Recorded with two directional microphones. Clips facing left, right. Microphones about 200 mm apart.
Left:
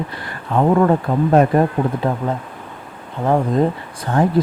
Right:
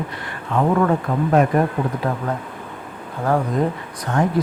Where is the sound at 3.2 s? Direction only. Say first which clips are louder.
Left 3 dB; 20° left (ahead or behind).